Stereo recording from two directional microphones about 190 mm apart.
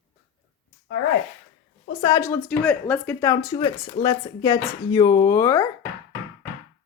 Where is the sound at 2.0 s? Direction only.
20° left (ahead or behind).